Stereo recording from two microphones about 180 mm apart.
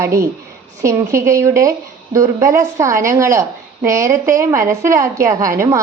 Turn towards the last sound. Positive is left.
turn(degrees=-15)  # may be behind; listen again after turning